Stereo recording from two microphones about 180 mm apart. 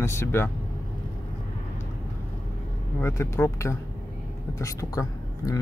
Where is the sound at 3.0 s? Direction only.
15° left (ahead or behind).